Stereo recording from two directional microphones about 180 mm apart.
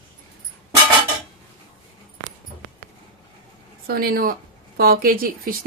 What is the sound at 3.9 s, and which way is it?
Speech, 55° right (ahead or behind).